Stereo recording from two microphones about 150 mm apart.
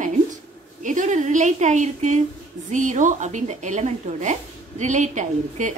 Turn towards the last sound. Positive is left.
turn(degrees=-55)  # may be behind; listen again after turning